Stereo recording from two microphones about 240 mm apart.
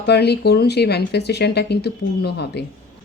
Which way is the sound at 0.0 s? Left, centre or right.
Left.